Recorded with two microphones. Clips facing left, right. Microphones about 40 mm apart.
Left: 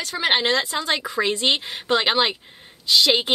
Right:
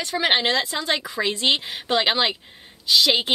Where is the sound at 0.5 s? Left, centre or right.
Left.